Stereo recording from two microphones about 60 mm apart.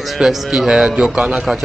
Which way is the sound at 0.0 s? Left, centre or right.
Centre.